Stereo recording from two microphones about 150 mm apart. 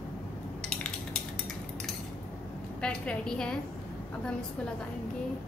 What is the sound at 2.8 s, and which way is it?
Speech, 5° left (ahead or behind).